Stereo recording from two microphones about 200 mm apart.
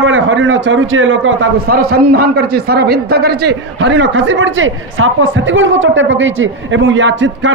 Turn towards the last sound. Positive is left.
turn(degrees=-65)  # may be behind; listen again after turning